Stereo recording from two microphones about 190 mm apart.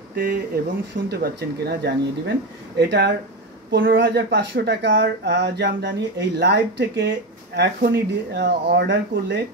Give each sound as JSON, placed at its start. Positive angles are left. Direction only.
{"t": 0.1, "sound": "speech", "side_deg": -55}